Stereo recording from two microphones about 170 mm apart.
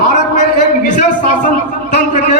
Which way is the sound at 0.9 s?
50° left (ahead or behind).